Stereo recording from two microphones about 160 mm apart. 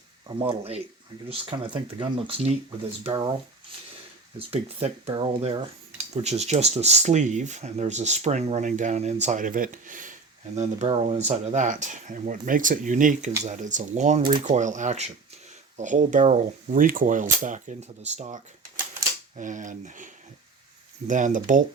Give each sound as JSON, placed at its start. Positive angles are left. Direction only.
{"t": 0.3, "sound": "speech", "side_deg": -35}
{"t": 4.4, "sound": "speech", "side_deg": -40}
{"t": 21.1, "sound": "speech", "side_deg": -55}